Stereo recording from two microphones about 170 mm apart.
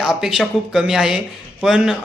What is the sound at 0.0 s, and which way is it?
Speech, centre (ahead or behind).